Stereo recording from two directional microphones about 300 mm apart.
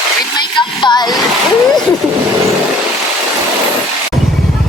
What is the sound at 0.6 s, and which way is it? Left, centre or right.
Music, centre.